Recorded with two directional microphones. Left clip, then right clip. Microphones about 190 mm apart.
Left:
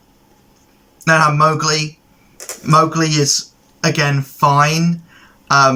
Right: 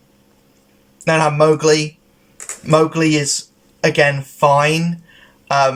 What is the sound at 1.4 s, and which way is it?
Speech, 15° right (ahead or behind).